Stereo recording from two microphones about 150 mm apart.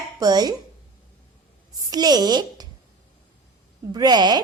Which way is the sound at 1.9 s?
25° right (ahead or behind).